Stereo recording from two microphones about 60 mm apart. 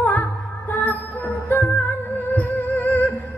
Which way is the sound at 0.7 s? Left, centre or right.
Left.